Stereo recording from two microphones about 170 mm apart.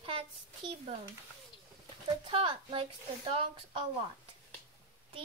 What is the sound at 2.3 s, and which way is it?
Speech, 30° right (ahead or behind).